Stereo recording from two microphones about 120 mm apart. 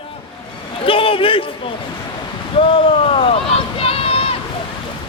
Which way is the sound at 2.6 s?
55° left (ahead or behind).